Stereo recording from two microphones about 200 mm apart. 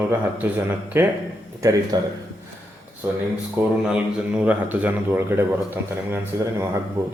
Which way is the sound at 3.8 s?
5° right (ahead or behind).